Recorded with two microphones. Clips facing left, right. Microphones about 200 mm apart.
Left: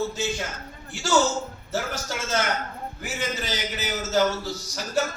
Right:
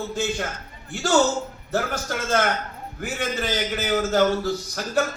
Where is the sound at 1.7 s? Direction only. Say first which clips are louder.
Right 4 dB; 55° right (ahead or behind).